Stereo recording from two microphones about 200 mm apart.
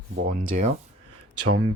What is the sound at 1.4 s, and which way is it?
Speech, 90° right.